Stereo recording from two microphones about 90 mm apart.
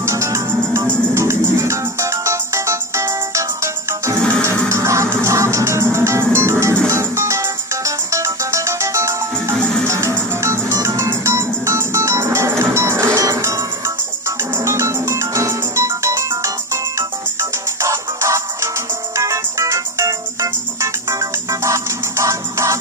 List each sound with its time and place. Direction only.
0.0 s music: 35° right (ahead or behind)